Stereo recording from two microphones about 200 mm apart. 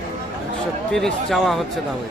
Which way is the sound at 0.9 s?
Centre (ahead or behind).